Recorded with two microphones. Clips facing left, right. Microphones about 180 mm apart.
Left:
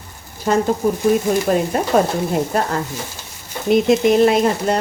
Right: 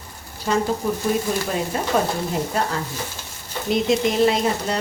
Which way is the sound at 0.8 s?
45° left (ahead or behind).